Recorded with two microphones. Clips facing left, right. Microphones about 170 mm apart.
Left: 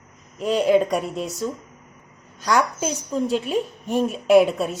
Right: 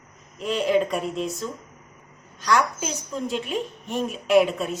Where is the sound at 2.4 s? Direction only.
40° left (ahead or behind).